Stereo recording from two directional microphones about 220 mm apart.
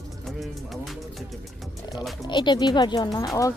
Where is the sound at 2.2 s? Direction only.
20° left (ahead or behind).